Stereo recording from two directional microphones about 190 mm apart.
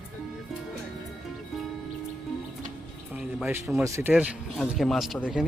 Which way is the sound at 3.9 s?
15° right (ahead or behind).